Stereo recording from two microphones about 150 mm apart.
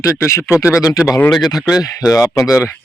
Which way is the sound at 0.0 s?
20° left (ahead or behind).